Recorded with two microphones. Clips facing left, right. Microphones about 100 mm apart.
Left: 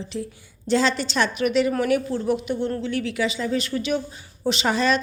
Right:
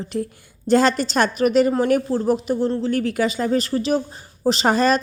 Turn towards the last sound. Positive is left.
turn(degrees=-45)  # may be behind; listen again after turning